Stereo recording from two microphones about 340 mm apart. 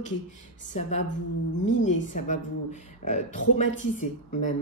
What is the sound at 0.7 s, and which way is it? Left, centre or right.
Speech, centre.